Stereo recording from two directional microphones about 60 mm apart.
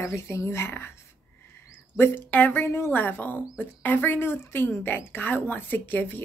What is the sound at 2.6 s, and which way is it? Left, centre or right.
Speech, left.